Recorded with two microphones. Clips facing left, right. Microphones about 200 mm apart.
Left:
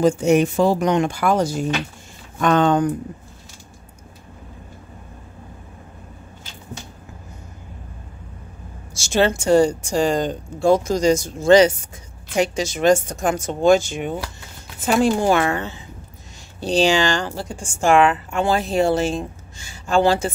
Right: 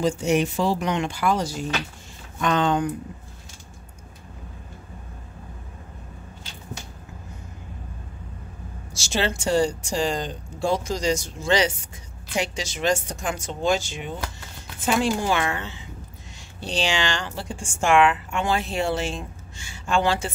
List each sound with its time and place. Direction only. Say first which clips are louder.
0.0 s speech: left 6 dB; 50° left (ahead or behind)
8.9 s speech: left 7 dB; 50° left (ahead or behind)